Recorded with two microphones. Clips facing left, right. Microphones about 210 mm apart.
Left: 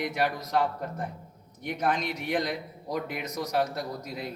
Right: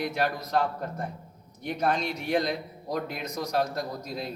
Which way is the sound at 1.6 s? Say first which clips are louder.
Right 1 dB; 15° left (ahead or behind).